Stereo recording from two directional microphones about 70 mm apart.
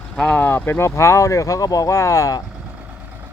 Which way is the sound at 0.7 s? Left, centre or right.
Left.